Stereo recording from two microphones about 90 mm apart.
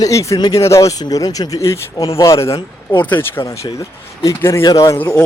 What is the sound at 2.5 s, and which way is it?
Speech, 60° left (ahead or behind).